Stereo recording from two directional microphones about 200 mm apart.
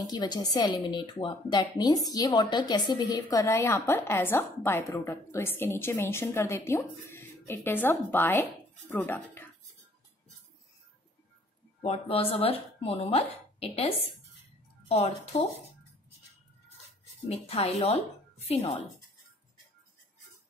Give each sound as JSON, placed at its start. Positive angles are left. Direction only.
{"t": 0.1, "sound": "a woman's voice", "side_deg": 20}
{"t": 11.8, "sound": "speech", "side_deg": 30}
{"t": 17.3, "sound": "speech", "side_deg": 30}